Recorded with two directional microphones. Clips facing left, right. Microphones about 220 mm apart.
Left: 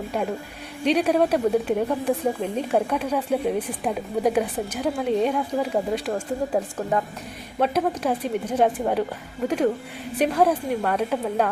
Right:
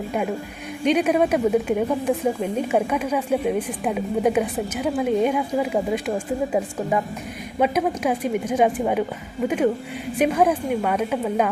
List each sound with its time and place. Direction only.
0.9 s a woman's voice: 5° right (ahead or behind)
10.2 s a woman's voice: 5° right (ahead or behind)